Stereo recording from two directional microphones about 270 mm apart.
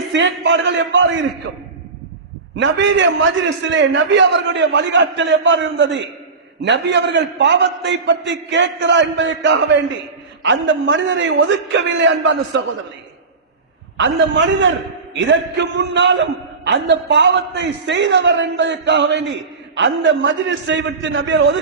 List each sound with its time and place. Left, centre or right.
0.1 s a man's voice: right
2.6 s a man's voice: right
13.9 s a man's voice: right